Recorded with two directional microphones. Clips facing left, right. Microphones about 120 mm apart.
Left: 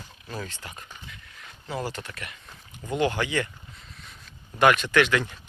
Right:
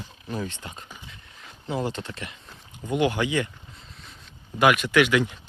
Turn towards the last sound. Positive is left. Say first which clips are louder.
# right 2 dB
turn(degrees=-15)  # may be behind; listen again after turning